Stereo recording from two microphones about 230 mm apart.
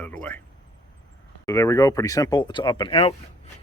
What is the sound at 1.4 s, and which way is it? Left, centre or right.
Speech, centre.